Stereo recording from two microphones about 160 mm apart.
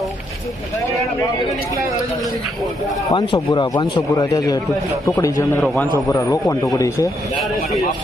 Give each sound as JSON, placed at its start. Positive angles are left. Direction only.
{"t": 3.1, "sound": "a man's voice", "side_deg": 25}
{"t": 5.5, "sound": "a man's voice", "side_deg": 0}
{"t": 6.1, "sound": "a man's voice", "side_deg": 20}